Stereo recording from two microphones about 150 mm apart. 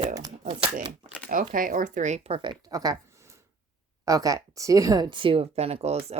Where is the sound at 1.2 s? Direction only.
65° right (ahead or behind).